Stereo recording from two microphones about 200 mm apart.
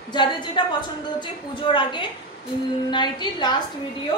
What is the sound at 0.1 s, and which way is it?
A woman's voice, 20° left (ahead or behind).